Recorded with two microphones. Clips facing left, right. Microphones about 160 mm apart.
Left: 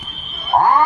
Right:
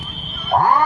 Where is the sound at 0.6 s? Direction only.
45° left (ahead or behind).